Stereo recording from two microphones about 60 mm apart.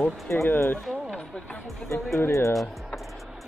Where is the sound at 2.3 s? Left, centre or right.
Left.